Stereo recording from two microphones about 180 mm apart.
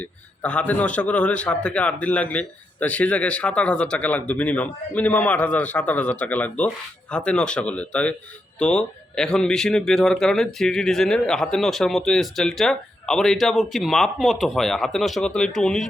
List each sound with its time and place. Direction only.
0.0 s a man's voice: 5° left (ahead or behind)